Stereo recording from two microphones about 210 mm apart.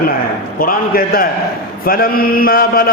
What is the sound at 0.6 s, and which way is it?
Mantra, 45° left (ahead or behind).